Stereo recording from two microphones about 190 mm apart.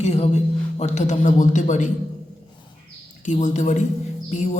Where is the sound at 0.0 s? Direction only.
35° left (ahead or behind).